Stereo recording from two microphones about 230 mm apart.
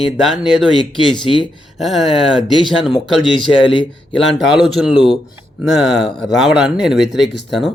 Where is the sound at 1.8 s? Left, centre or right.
Centre.